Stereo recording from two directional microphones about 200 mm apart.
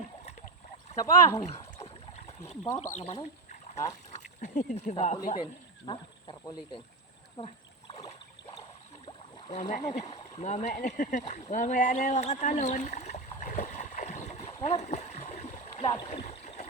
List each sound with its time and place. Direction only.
0.9 s speech: 15° left (ahead or behind)
1.5 s rowboat: 30° left (ahead or behind)
3.0 s speech: 30° left (ahead or behind)
5.8 s speech: 25° left (ahead or behind)
8.0 s rowboat: 20° left (ahead or behind)
9.0 s rowboat: 35° left (ahead or behind)
10.3 s speech: 35° left (ahead or behind)
11.3 s a sound: 35° left (ahead or behind)